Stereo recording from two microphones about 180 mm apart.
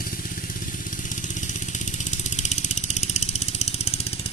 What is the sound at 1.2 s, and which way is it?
Vehicle, 45° left (ahead or behind).